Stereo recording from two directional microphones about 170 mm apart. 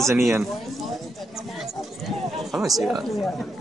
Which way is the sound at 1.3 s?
Centre (ahead or behind).